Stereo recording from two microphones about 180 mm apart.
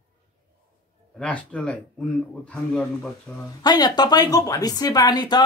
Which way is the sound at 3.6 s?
20° left (ahead or behind).